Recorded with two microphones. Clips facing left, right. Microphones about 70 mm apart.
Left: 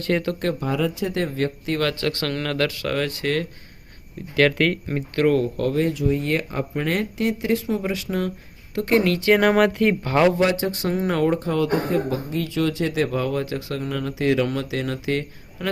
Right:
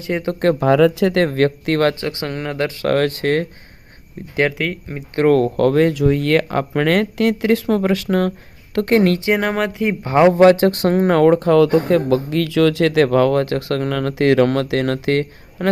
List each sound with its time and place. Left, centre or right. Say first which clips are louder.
0.1 s speech: right 1 dB; centre
0.6 s speech: right 10 dB; right
2.0 s speech: right 1 dB; right
2.8 s speech: right 7 dB; right
4.5 s speech: left 2 dB; centre
5.2 s speech: right 6 dB; right
9.3 s speech: left 2 dB; centre
9.8 s speech: right 4 dB; right
10.3 s speech: right 10 dB; right